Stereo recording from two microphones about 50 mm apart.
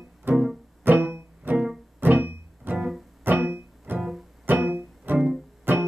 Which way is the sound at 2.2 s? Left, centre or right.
Right.